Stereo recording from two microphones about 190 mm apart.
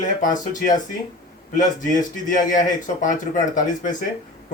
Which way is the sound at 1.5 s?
40° left (ahead or behind).